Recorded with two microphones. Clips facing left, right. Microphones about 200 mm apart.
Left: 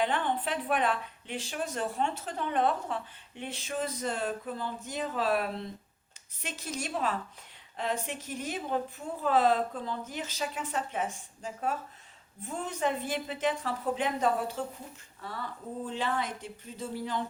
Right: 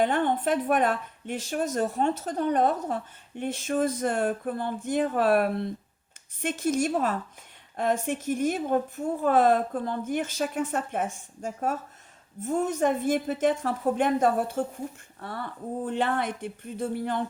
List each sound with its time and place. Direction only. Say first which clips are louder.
0.0 s a woman's voice: right 6 dB; 50° right (ahead or behind)